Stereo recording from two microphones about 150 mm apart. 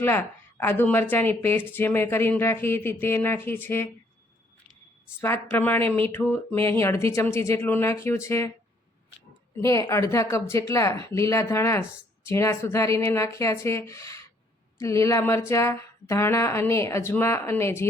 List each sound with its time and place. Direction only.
0.0 s speech: 15° left (ahead or behind)
5.2 s speech: 15° left (ahead or behind)
9.6 s speech: 20° left (ahead or behind)